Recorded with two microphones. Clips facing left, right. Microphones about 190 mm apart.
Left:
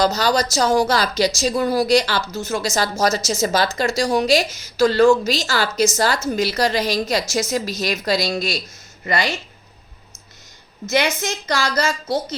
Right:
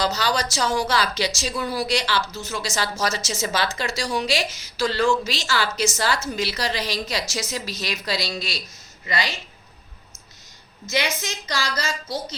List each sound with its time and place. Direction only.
0.0 s a woman's voice: 45° left (ahead or behind)
10.8 s a woman's voice: 50° left (ahead or behind)